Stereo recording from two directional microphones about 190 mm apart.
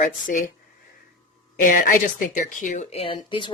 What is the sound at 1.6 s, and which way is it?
Speech, 45° left (ahead or behind).